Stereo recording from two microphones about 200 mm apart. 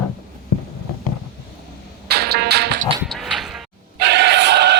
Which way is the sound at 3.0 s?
Centre (ahead or behind).